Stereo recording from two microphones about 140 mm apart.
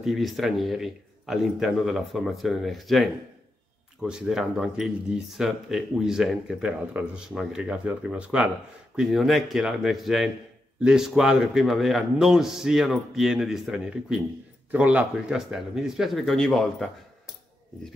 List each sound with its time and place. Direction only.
0.0 s speech: centre (ahead or behind)